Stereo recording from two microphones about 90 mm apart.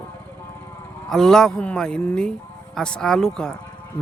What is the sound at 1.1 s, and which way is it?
Speech, 5° left (ahead or behind).